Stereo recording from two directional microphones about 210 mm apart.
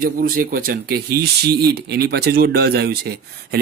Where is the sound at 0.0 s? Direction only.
45° right (ahead or behind).